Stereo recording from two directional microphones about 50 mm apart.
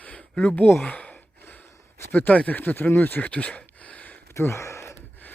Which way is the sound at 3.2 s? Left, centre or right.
Left.